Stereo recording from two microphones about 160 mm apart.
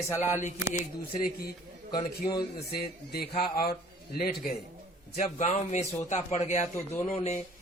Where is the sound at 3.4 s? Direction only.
65° left (ahead or behind).